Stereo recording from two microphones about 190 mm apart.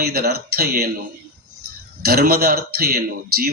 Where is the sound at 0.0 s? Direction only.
55° right (ahead or behind).